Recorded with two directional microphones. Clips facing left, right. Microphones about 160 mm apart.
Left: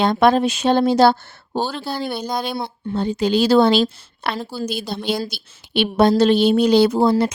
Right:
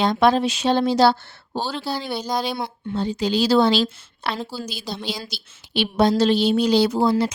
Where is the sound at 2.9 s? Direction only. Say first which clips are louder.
Left 3 dB; 55° left (ahead or behind).